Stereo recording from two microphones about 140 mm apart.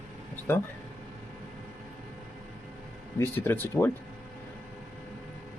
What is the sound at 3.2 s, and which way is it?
Speech, 15° left (ahead or behind).